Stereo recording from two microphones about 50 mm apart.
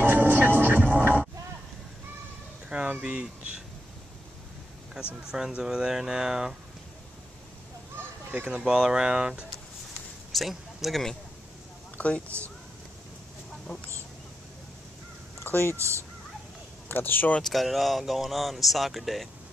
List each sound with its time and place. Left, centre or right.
0.0 s music: right
2.7 s speech: right
5.0 s speech: centre
8.5 s speech: centre
10.3 s a man's voice: centre
12.0 s speech: left
15.4 s a sound: left
15.7 s speech: right
16.9 s speech: left
17.4 s speech: centre